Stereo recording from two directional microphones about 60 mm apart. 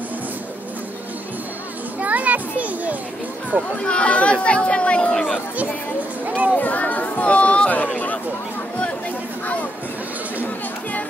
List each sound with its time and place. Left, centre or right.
2.0 s music: right
3.8 s speech: centre
5.1 s speech: centre
6.2 s speech: right
6.5 s speech: left